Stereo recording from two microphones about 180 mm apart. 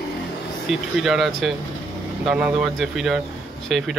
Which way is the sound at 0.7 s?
Centre (ahead or behind).